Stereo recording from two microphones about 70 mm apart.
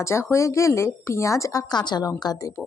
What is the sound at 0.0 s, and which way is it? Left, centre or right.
Speech, left.